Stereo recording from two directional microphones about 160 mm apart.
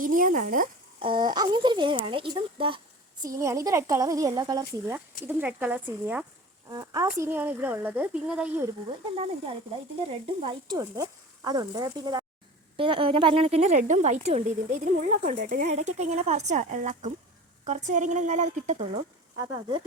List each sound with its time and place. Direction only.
0.0 s speech: 60° right (ahead or behind)
1.0 s speech: 30° right (ahead or behind)
5.2 s speech: 10° right (ahead or behind)
6.7 s speech: 20° right (ahead or behind)
10.4 s a woman's voice: 30° right (ahead or behind); by 18.8 s 50° right (ahead or behind)
19.4 s speech: 30° right (ahead or behind)